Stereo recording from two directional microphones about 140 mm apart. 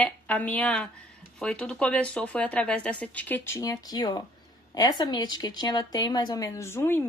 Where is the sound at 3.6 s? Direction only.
25° left (ahead or behind).